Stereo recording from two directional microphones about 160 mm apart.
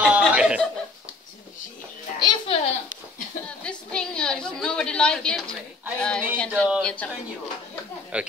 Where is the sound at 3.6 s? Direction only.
5° left (ahead or behind).